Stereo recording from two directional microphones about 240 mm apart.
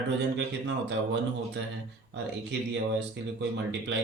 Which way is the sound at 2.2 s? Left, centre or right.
Right.